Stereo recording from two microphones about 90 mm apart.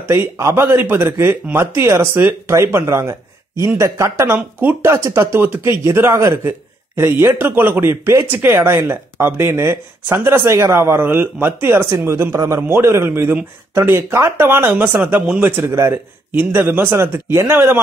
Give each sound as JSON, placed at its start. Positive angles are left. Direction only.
{"t": 0.1, "sound": "speech", "side_deg": -30}